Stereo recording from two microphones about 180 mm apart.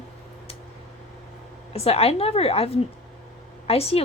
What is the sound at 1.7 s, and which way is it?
A woman's voice, 35° left (ahead or behind).